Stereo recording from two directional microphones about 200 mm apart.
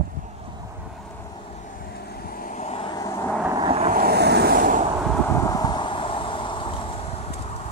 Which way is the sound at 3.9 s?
50° right (ahead or behind).